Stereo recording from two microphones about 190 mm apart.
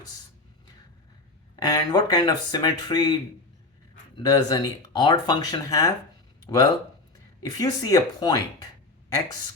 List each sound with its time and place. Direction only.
1.5 s speech: 20° left (ahead or behind)
6.4 s a sound: 20° left (ahead or behind)
7.4 s speech: 20° left (ahead or behind)